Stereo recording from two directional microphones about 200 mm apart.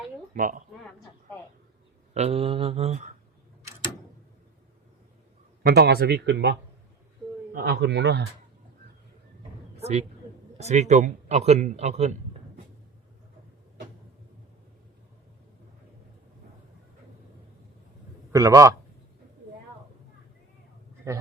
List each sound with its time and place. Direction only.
0.3 s speech: 45° right (ahead or behind)
2.1 s speech: 30° right (ahead or behind)
5.6 s speech: 55° right (ahead or behind)
9.7 s a sound: 30° right (ahead or behind)
10.6 s a man's voice: 35° right (ahead or behind)
18.3 s a man's voice: 15° right (ahead or behind)